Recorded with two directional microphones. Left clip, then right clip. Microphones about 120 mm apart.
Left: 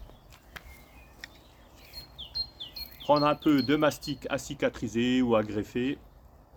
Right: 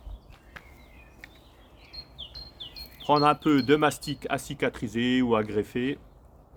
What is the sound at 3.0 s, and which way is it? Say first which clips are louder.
Speech: right 2 dB; 90° right.